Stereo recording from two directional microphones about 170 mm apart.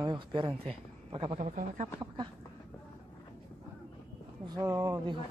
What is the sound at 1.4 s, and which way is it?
Speech, 45° right (ahead or behind).